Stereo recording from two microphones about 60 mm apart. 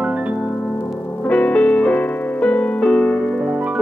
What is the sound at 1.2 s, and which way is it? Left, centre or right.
Piano, left.